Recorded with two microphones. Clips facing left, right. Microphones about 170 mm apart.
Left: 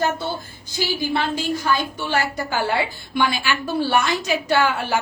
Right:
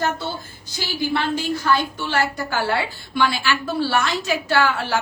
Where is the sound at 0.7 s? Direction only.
15° left (ahead or behind).